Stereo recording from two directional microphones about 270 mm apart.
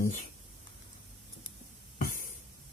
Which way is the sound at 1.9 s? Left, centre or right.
Left.